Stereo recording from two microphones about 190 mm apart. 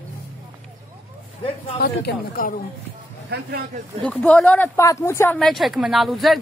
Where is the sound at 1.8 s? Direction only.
50° left (ahead or behind).